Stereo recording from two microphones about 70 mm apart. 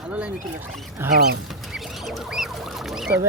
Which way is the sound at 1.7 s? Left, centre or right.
Centre.